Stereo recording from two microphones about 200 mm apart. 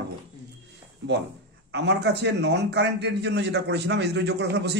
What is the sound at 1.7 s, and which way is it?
A man's voice, 60° right (ahead or behind).